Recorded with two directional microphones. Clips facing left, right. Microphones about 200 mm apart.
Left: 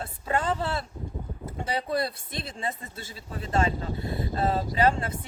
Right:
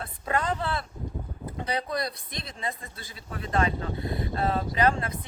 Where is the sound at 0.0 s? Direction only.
30° left (ahead or behind).